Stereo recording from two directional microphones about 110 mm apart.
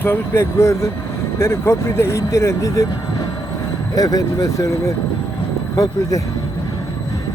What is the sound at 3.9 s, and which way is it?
Speech, 35° left (ahead or behind).